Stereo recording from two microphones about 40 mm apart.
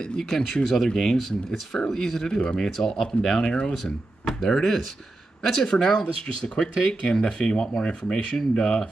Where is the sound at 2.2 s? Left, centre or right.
Left.